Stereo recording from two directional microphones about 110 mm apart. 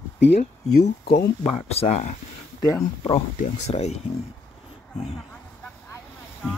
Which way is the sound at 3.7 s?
80° left.